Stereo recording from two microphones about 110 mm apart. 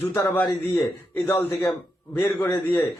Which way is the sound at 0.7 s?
20° left (ahead or behind).